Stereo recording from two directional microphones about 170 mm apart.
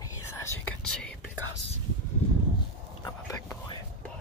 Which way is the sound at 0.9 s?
5° left (ahead or behind).